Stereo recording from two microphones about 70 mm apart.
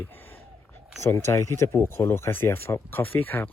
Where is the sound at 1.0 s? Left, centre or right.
Left.